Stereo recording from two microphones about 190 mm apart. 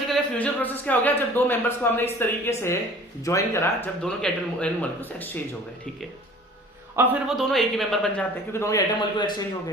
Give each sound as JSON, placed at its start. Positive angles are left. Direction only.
{"t": 0.1, "sound": "speech", "side_deg": 10}
{"t": 6.9, "sound": "a man's voice", "side_deg": -10}